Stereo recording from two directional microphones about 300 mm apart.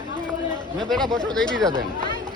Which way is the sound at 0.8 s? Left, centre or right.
Centre.